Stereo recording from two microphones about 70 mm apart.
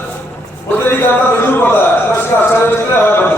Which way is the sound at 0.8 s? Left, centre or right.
Left.